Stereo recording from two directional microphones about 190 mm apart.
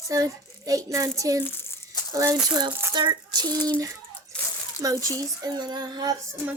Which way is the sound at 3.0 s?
20° right (ahead or behind).